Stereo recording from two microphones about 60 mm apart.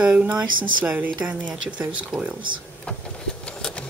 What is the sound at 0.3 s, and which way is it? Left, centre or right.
Speech, centre.